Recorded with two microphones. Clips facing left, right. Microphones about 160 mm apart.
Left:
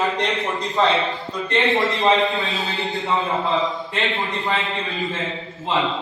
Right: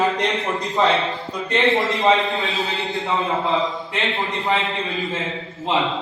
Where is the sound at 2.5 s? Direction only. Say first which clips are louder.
Right 2 dB; 20° right (ahead or behind).